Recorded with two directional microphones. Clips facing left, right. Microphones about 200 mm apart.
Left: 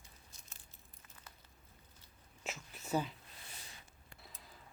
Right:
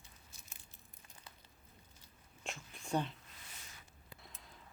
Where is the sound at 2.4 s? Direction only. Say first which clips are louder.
Left 1 dB; 5° left (ahead or behind).